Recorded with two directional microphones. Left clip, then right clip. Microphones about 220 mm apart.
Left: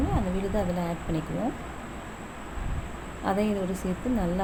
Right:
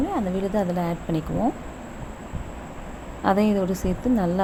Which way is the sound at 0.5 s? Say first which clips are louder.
Right 4 dB; 30° right (ahead or behind).